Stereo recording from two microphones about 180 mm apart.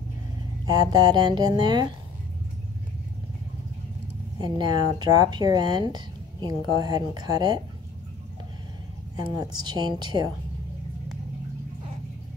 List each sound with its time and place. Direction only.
0.7 s speech: 20° right (ahead or behind)
4.4 s speech: 25° right (ahead or behind)
9.4 s speech: 20° right (ahead or behind)